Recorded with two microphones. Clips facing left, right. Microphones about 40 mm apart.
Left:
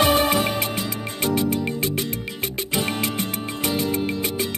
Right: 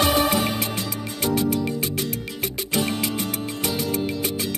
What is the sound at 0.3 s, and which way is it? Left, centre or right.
Music, centre.